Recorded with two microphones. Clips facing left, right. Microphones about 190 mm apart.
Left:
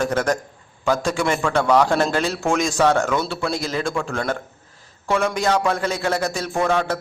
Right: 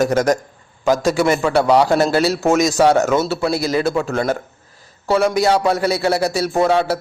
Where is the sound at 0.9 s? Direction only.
5° right (ahead or behind).